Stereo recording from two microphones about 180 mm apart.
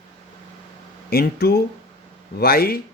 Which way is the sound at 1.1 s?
60° left (ahead or behind).